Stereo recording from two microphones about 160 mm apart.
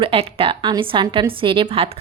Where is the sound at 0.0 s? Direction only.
35° right (ahead or behind).